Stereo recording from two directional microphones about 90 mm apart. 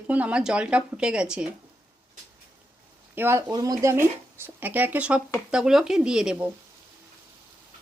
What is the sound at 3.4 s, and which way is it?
Speech, 45° right (ahead or behind).